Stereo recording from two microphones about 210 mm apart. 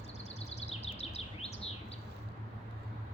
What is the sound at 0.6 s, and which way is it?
Bird vocalization, 30° left (ahead or behind).